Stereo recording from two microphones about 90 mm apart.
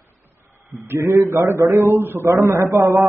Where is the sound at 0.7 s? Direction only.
35° right (ahead or behind).